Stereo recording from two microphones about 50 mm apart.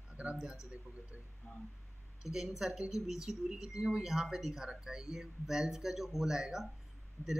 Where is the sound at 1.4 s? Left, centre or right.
Centre.